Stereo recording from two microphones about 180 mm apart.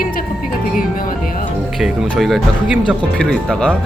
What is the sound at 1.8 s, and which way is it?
Speech, centre (ahead or behind).